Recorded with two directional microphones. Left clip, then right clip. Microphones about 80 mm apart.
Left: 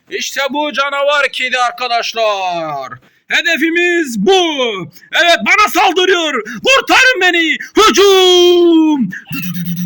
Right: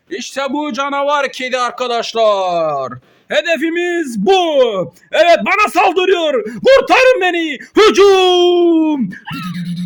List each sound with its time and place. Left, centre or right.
0.1 s a man's voice: centre; by 9.8 s right